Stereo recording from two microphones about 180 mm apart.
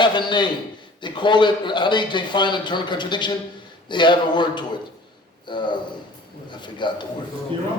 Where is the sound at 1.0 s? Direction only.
25° left (ahead or behind).